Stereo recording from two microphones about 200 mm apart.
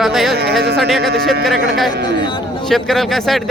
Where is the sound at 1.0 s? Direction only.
55° right (ahead or behind).